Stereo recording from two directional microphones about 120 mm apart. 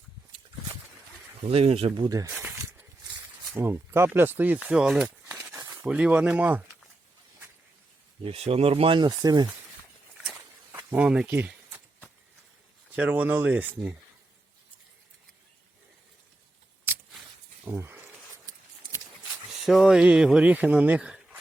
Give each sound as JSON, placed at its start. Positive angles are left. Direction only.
{"t": 1.5, "sound": "speech", "side_deg": -55}
{"t": 2.0, "sound": "speech", "side_deg": -30}
{"t": 2.3, "sound": "snake", "side_deg": -15}
{"t": 3.5, "sound": "speech", "side_deg": -20}
{"t": 8.2, "sound": "speech", "side_deg": -55}
{"t": 10.2, "sound": "walk", "side_deg": -15}
{"t": 11.3, "sound": "a sound", "side_deg": -15}
{"t": 13.0, "sound": "speech", "side_deg": -10}
{"t": 17.7, "sound": "snake", "side_deg": -20}
{"t": 19.6, "sound": "speech", "side_deg": -5}